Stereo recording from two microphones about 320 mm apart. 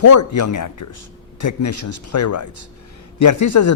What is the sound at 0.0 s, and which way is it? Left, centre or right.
Speech, left.